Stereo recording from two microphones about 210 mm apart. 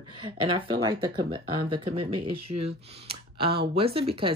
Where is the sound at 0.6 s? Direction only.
20° right (ahead or behind).